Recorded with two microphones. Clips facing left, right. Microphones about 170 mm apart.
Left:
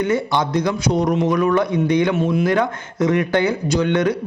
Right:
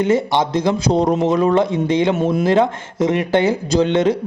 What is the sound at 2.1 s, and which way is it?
Speech, 40° right (ahead or behind).